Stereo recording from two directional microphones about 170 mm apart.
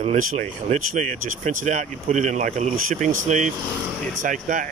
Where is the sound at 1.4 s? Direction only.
45° right (ahead or behind).